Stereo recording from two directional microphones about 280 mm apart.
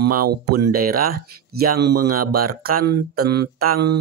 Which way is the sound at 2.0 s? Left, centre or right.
Right.